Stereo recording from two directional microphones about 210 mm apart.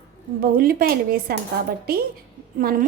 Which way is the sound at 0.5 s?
45° right (ahead or behind).